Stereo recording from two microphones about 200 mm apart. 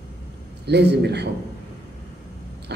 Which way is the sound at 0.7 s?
55° right (ahead or behind).